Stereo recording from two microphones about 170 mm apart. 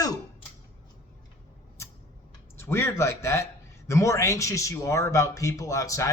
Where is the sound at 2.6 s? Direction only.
15° left (ahead or behind).